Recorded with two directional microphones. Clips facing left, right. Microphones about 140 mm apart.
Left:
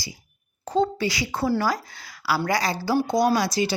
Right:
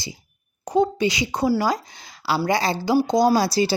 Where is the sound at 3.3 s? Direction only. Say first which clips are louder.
Right 3 dB; 35° right (ahead or behind).